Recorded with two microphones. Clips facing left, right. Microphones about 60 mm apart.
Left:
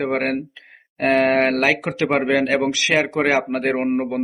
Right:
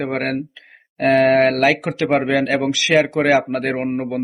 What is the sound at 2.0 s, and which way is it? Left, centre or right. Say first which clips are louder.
Speech: right 2 dB; centre.